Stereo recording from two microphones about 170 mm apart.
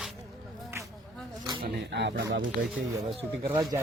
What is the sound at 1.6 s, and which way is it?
Speech, 90° right.